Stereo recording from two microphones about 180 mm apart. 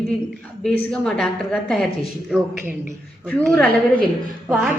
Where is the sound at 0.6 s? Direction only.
5° left (ahead or behind).